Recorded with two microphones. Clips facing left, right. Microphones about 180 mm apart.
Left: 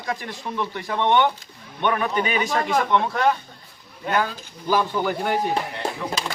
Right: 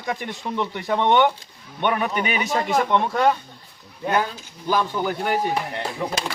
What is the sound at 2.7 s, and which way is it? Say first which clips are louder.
Speech: right 2 dB; 15° right (ahead or behind).